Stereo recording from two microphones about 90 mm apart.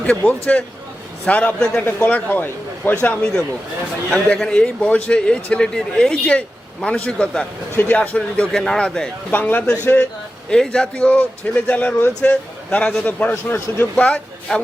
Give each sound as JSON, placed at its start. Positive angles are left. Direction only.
{"t": 0.0, "sound": "a man's voice", "side_deg": 15}
{"t": 2.0, "sound": "speech", "side_deg": 20}
{"t": 3.0, "sound": "a man's voice", "side_deg": 10}
{"t": 9.3, "sound": "speech", "side_deg": 20}
{"t": 10.5, "sound": "a man's voice", "side_deg": 10}
{"t": 13.9, "sound": "a man's voice", "side_deg": 10}